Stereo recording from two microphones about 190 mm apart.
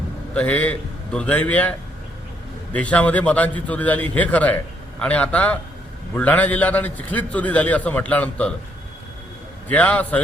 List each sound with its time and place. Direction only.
0.3 s a man's voice: 5° left (ahead or behind)
2.7 s a man's voice: 5° left (ahead or behind)
9.6 s a man's voice: 5° left (ahead or behind)